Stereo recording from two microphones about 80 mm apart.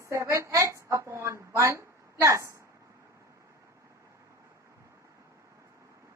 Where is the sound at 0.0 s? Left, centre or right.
Right.